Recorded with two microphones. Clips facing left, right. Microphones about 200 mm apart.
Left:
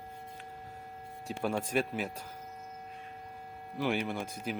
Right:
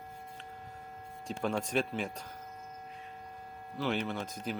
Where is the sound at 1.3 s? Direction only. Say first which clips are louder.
Even; 10° left (ahead or behind).